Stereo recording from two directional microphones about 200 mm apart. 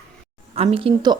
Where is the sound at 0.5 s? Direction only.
30° right (ahead or behind).